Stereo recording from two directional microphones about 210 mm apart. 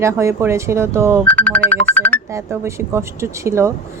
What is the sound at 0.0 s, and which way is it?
Speech, 15° right (ahead or behind).